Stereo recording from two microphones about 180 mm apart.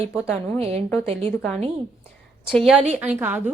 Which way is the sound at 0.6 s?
35° right (ahead or behind).